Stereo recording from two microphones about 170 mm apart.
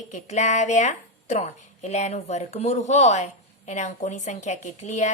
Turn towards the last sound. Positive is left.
turn(degrees=45)  # may be behind; listen again after turning